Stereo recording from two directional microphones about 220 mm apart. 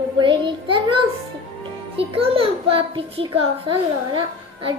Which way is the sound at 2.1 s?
25° right (ahead or behind).